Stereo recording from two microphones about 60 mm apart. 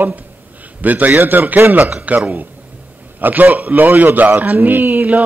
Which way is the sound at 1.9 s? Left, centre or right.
Right.